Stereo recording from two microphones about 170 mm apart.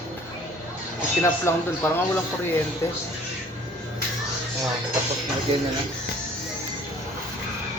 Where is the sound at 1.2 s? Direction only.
15° left (ahead or behind).